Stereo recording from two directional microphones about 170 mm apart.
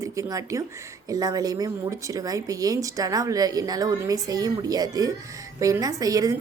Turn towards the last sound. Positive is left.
turn(degrees=-20)  # may be behind; listen again after turning